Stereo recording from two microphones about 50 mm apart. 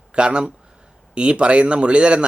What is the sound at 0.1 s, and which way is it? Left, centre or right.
A man's voice, right.